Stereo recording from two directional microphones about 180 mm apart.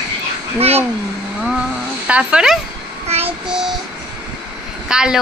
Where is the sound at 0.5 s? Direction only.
35° right (ahead or behind).